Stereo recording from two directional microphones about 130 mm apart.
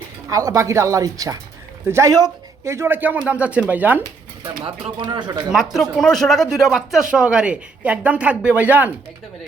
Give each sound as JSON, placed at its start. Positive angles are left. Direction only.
{"t": 0.3, "sound": "speech", "side_deg": -25}
{"t": 4.6, "sound": "speech", "side_deg": -35}
{"t": 6.0, "sound": "speech", "side_deg": 5}